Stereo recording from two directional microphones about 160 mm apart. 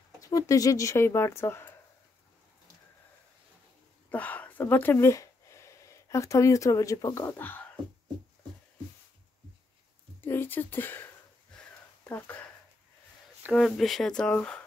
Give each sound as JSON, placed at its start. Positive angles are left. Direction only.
{"t": 0.2, "sound": "speech", "side_deg": 20}
{"t": 4.1, "sound": "speech", "side_deg": 10}
{"t": 10.2, "sound": "speech", "side_deg": 15}
{"t": 12.1, "sound": "speech", "side_deg": 10}
{"t": 13.5, "sound": "speech", "side_deg": 0}